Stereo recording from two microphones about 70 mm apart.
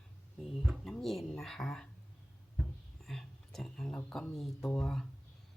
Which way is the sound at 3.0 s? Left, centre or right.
Centre.